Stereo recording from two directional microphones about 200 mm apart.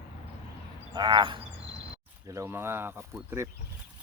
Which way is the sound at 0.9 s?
25° right (ahead or behind).